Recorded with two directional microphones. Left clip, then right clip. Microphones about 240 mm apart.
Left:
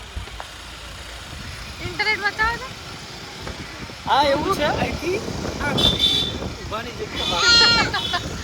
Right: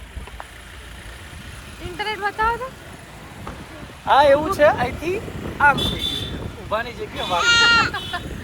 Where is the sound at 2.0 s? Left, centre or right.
Centre.